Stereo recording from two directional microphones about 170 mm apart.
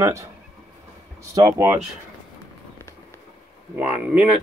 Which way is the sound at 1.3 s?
20° right (ahead or behind).